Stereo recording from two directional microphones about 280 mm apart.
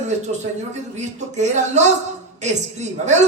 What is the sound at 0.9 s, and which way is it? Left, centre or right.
Speech, right.